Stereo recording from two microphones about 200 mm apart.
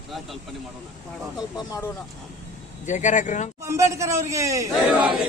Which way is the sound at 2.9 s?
40° left (ahead or behind).